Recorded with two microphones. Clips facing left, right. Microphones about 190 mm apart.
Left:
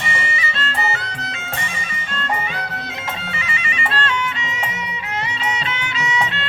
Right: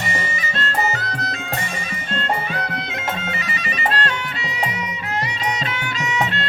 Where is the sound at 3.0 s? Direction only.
40° right (ahead or behind).